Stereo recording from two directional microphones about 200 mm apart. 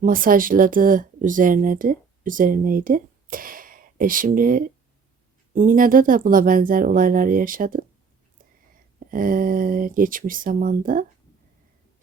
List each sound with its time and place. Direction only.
0.0 s speech: 45° right (ahead or behind)
9.0 s speech: 45° right (ahead or behind)